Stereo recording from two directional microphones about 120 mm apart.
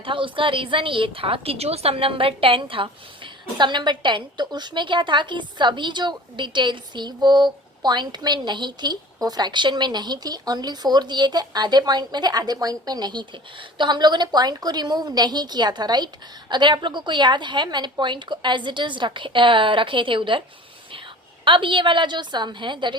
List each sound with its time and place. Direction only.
0.0 s a woman's voice: 45° right (ahead or behind)
21.4 s a woman's voice: 45° right (ahead or behind)